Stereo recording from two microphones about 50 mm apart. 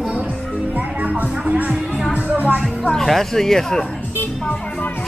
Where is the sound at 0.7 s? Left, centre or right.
Right.